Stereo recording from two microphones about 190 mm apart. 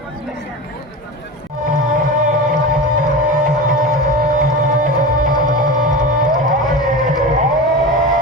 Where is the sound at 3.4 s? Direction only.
45° right (ahead or behind).